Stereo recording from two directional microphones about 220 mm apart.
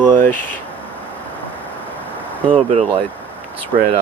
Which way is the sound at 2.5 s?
30° right (ahead or behind).